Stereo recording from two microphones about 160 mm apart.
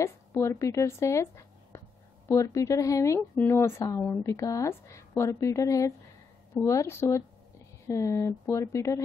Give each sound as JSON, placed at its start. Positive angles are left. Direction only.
{"t": 0.0, "sound": "a woman's voice", "side_deg": 20}